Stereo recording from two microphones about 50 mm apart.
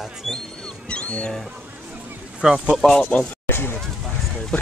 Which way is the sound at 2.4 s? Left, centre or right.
Centre.